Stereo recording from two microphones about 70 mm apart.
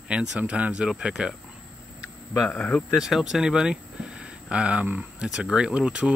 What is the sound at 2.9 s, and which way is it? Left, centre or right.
Speech, centre.